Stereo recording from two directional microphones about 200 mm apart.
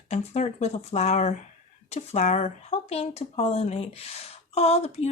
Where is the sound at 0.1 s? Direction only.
35° left (ahead or behind).